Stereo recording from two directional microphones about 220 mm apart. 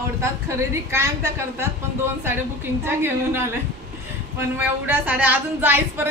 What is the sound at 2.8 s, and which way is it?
Speech, 10° right (ahead or behind).